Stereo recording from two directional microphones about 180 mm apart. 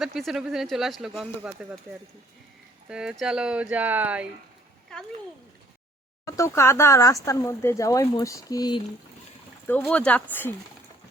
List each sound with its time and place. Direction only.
0.0 s speech: centre (ahead or behind)
2.9 s speech: 5° right (ahead or behind)
6.2 s speech: 15° left (ahead or behind)
9.6 s speech: 10° left (ahead or behind)